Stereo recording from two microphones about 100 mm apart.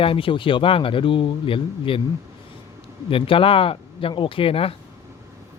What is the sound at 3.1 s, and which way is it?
Speech, 65° left (ahead or behind).